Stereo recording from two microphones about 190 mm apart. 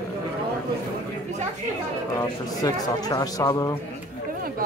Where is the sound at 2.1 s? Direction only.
20° left (ahead or behind).